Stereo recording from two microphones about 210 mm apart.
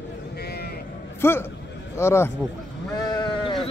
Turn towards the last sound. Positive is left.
turn(degrees=20)  # may be behind; listen again after turning